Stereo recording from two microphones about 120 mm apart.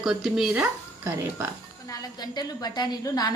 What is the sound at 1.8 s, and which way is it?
A woman's voice, 30° left (ahead or behind).